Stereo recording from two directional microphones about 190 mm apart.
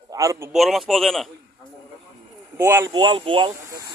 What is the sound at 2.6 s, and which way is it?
Speech, 15° right (ahead or behind).